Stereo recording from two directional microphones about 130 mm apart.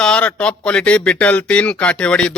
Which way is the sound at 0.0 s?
10° left (ahead or behind).